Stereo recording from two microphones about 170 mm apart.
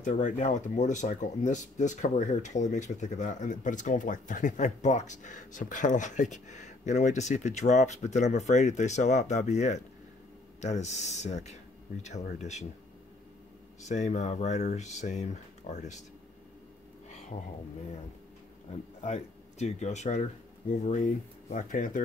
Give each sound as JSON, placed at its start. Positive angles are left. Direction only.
{"t": 0.0, "sound": "speech", "side_deg": 45}
{"t": 13.8, "sound": "speech", "side_deg": 45}
{"t": 18.7, "sound": "speech", "side_deg": 40}